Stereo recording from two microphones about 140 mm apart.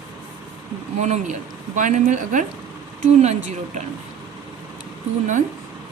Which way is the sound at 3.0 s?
50° right (ahead or behind).